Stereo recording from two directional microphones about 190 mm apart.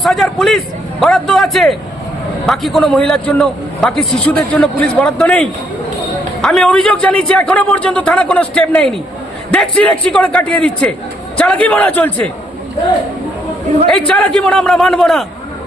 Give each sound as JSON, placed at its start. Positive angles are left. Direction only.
{"t": 0.0, "sound": "a man's voice", "side_deg": 0}
{"t": 14.1, "sound": "a man's voice", "side_deg": 5}